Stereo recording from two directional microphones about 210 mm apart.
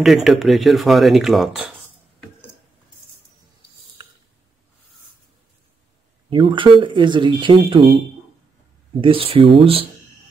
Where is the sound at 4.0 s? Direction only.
20° right (ahead or behind).